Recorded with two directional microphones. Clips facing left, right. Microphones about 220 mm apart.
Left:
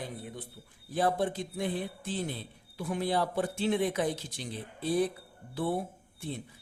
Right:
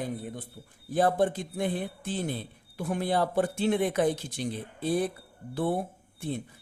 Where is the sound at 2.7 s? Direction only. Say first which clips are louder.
Right 2 dB; 55° right (ahead or behind).